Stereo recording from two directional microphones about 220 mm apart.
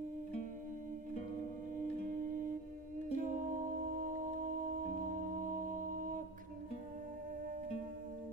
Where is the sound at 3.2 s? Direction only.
35° right (ahead or behind).